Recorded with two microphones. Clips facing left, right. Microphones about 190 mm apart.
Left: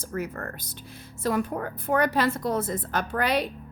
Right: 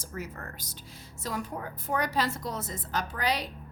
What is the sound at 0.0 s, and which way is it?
A woman's voice, 55° left (ahead or behind).